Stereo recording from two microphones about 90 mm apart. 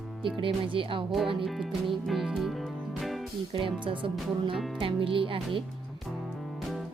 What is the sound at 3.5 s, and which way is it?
Speech, 70° right (ahead or behind).